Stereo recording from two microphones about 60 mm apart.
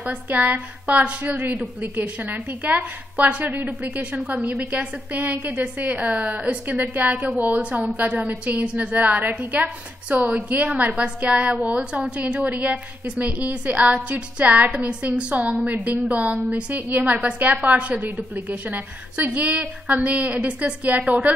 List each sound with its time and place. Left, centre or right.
0.0 s a woman's voice: right